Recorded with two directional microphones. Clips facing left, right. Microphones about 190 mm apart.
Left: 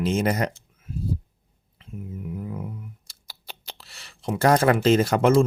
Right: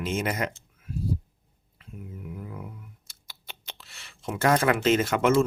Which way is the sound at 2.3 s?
30° left (ahead or behind).